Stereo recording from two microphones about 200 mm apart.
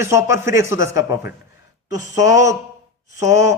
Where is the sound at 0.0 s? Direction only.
15° right (ahead or behind).